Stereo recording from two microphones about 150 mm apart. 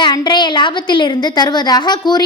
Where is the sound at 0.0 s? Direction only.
30° left (ahead or behind).